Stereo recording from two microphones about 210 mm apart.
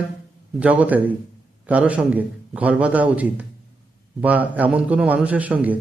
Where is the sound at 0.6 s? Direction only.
5° right (ahead or behind).